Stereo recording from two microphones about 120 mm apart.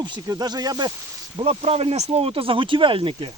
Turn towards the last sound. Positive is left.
turn(degrees=-45)  # may be behind; listen again after turning